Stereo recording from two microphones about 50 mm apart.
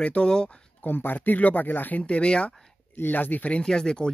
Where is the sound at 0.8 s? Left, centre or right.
Left.